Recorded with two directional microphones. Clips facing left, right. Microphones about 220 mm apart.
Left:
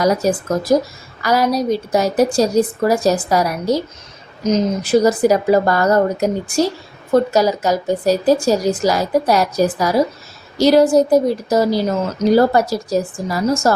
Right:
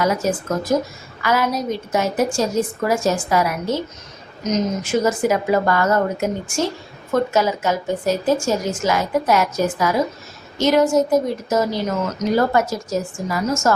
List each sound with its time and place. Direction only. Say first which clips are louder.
0.0 s a woman's voice: left 4 dB; 35° left (ahead or behind)